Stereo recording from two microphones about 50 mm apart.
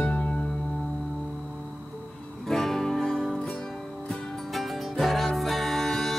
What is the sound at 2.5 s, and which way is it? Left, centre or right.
Music, centre.